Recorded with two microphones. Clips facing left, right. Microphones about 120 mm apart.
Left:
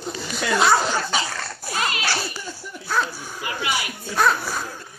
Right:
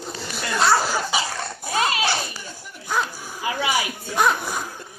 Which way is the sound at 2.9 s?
15° right (ahead or behind).